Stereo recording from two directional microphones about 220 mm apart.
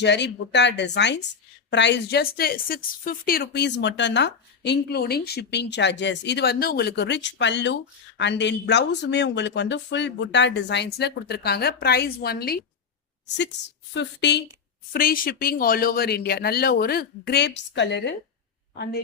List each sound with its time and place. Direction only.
0.0 s a woman's voice: 50° left (ahead or behind)
14.9 s a woman's voice: 40° left (ahead or behind)